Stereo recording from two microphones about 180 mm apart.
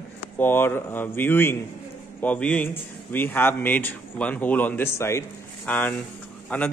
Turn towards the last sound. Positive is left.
turn(degrees=10)  # may be behind; listen again after turning